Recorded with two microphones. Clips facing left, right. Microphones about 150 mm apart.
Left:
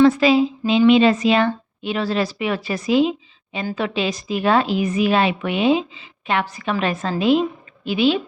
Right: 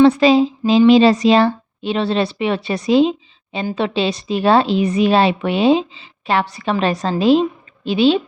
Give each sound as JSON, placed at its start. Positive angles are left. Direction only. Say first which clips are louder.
{"t": 0.0, "sound": "a woman's voice", "louder": "right 3 dB", "side_deg": -30}